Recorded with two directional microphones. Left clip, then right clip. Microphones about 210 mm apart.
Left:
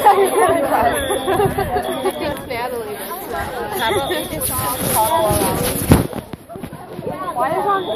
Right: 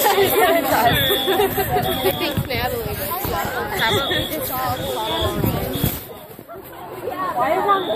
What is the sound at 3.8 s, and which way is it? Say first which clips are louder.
Chatter: left 1 dB; 35° left (ahead or behind).